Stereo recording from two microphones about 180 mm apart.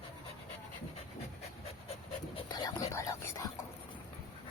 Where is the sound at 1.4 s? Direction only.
35° left (ahead or behind).